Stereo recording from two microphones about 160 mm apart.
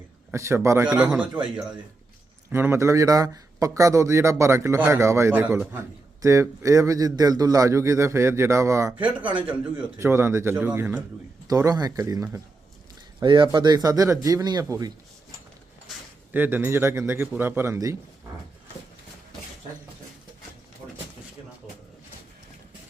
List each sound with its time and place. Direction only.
0.3 s a man's voice: 15° right (ahead or behind)
0.9 s a man's voice: 5° right (ahead or behind)
11.4 s a man's voice: 20° right (ahead or behind)
13.1 s a man's voice: 30° right (ahead or behind)
16.3 s a man's voice: 10° right (ahead or behind)
20.8 s a sound: 15° right (ahead or behind)